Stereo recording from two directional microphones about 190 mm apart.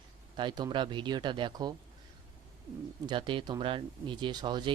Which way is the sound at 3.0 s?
25° right (ahead or behind).